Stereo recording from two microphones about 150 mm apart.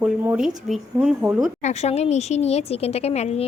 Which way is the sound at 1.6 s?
50° left (ahead or behind).